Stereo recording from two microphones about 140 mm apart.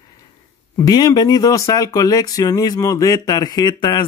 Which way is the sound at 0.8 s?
30° left (ahead or behind).